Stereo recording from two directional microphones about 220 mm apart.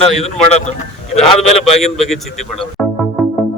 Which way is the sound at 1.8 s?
Centre (ahead or behind).